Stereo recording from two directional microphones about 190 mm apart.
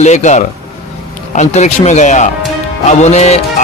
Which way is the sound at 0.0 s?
35° left (ahead or behind).